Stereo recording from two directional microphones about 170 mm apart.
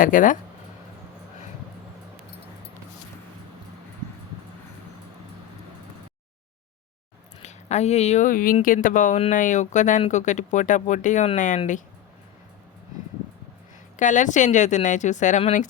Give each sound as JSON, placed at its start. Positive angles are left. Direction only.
{"t": 0.0, "sound": "speech", "side_deg": 50}
{"t": 7.4, "sound": "speech", "side_deg": 40}
{"t": 13.9, "sound": "speech", "side_deg": 45}